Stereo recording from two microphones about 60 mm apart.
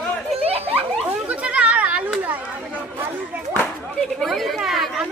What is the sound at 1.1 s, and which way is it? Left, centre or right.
Children playing, right.